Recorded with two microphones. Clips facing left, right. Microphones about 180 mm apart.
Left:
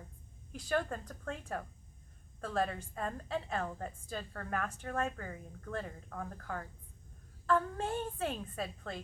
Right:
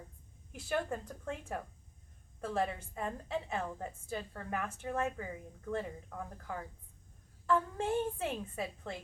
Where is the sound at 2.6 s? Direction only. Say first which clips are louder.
Left 1 dB; 10° right (ahead or behind).